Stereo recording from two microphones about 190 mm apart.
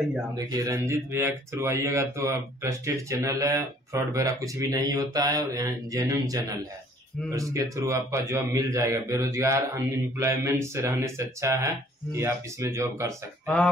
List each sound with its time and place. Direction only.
0.5 s speech: 15° right (ahead or behind)